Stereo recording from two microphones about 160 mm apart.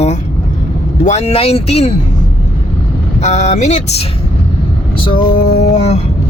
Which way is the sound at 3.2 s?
45° left (ahead or behind).